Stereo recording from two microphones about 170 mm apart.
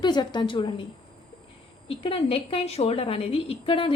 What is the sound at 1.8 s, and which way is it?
A woman's voice, 30° left (ahead or behind).